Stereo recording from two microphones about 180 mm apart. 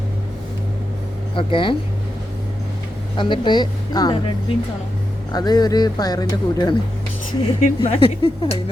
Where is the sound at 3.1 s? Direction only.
25° left (ahead or behind).